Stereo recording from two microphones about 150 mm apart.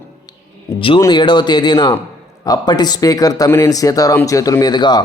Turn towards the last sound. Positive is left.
turn(degrees=30)  # may be behind; listen again after turning